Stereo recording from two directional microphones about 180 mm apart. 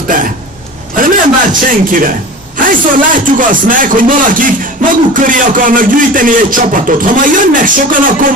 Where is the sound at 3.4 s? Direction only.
50° right (ahead or behind).